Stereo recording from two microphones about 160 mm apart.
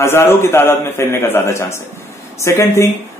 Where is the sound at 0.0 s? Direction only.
15° left (ahead or behind).